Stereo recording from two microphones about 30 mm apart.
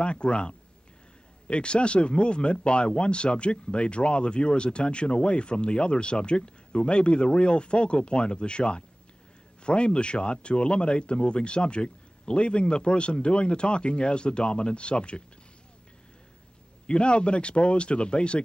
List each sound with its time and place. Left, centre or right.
0.0 s a man's voice: left
16.8 s speech: left